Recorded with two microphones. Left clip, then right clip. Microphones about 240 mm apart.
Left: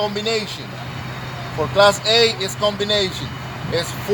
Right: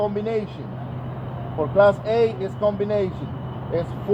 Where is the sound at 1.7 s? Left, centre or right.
Left.